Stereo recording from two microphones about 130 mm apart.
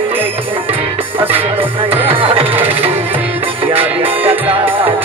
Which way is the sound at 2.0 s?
45° right (ahead or behind).